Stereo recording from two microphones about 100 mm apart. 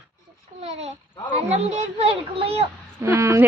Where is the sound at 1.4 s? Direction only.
90° right.